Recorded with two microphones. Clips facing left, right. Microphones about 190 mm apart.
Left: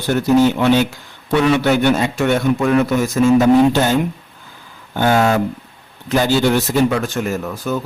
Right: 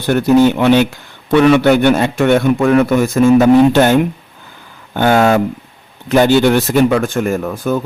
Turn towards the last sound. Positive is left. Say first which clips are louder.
# right 5 dB
turn(degrees=-55)  # may be behind; listen again after turning